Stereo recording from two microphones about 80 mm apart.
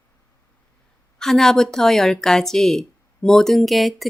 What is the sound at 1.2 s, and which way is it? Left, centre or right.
A woman's voice, centre.